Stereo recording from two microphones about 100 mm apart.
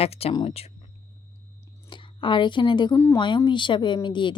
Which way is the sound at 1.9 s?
50° left (ahead or behind).